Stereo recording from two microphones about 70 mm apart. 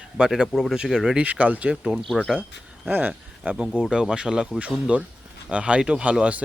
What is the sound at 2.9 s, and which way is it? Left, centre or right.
Speech, right.